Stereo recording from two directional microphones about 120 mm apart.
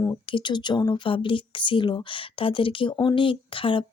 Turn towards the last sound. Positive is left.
turn(degrees=45)  # may be behind; listen again after turning